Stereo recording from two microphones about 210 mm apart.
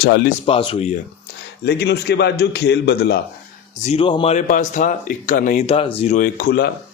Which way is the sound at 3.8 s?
30° left (ahead or behind).